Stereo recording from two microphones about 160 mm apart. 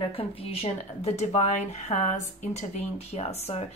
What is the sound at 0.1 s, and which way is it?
Speech, 35° left (ahead or behind).